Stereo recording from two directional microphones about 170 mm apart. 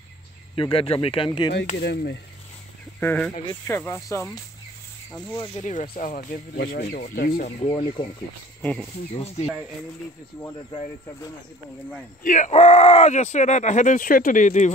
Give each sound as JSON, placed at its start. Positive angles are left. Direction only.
{"t": 0.6, "sound": "speech", "side_deg": 30}
{"t": 1.8, "sound": "a sound", "side_deg": 70}
{"t": 3.0, "sound": "speech", "side_deg": 10}
{"t": 5.5, "sound": "speech", "side_deg": 45}
{"t": 7.4, "sound": "speech", "side_deg": 35}
{"t": 9.1, "sound": "speech", "side_deg": 35}
{"t": 12.2, "sound": "speech", "side_deg": 50}